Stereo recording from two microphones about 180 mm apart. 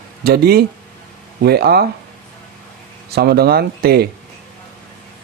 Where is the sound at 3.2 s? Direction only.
65° right (ahead or behind).